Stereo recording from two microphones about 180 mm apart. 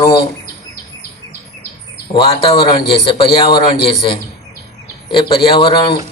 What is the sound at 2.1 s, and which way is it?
A man's voice, 30° left (ahead or behind).